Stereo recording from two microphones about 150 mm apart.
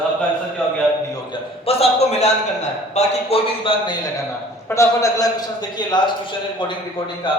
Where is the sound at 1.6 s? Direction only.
45° left (ahead or behind).